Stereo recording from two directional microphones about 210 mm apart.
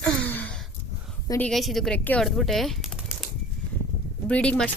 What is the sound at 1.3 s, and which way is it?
Speech, 5° left (ahead or behind).